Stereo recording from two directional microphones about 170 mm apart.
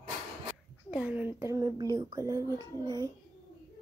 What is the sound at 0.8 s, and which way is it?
A woman's voice, 5° right (ahead or behind).